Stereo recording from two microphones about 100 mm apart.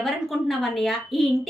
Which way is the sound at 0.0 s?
Centre (ahead or behind).